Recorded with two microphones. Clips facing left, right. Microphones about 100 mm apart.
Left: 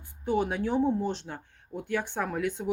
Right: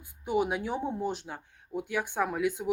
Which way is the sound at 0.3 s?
15° right (ahead or behind).